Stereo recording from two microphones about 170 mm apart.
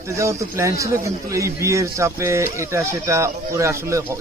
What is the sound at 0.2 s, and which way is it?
A man's voice, 15° right (ahead or behind).